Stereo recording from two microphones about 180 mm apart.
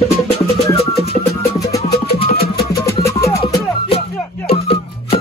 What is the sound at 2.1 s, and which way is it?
Music, 30° left (ahead or behind).